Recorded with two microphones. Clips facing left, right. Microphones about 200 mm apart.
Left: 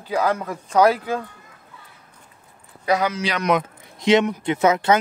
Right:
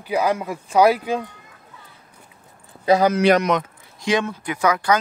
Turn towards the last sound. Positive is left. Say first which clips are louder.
# left 2 dB
turn(degrees=25)  # may be behind; listen again after turning